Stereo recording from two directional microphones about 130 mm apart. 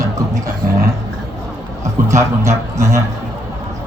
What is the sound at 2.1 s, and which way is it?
Speech, 20° right (ahead or behind).